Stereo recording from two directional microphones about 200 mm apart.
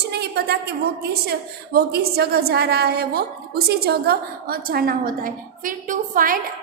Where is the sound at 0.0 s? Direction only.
55° right (ahead or behind).